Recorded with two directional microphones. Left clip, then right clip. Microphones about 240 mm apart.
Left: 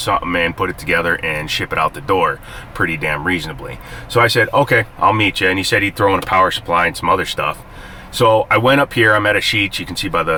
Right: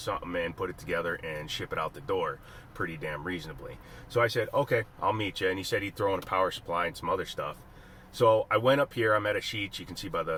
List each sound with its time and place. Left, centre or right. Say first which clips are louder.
0.0 s speech: left 16 dB; left